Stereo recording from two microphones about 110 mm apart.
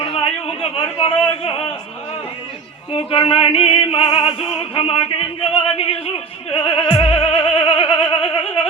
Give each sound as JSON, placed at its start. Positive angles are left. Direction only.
{"t": 0.0, "sound": "a sound", "side_deg": 60}
{"t": 2.9, "sound": "opera", "side_deg": 55}
{"t": 6.5, "sound": "music", "side_deg": 55}